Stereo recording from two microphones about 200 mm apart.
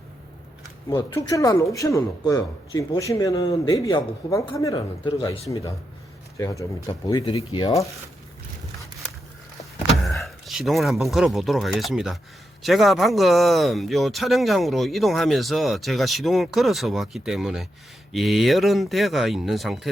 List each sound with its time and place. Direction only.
0.9 s a man's voice: 15° left (ahead or behind)
9.9 s speech: centre (ahead or behind)